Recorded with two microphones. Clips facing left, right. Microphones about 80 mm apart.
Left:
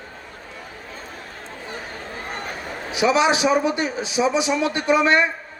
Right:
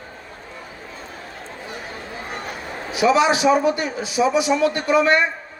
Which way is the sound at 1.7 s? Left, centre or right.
Left.